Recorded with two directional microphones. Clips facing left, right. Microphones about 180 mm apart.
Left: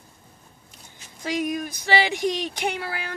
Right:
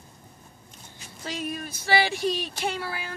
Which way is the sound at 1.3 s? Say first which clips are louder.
Left 7 dB; 15° left (ahead or behind).